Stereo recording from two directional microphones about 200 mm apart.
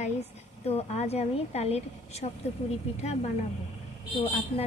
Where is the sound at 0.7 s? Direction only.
30° left (ahead or behind).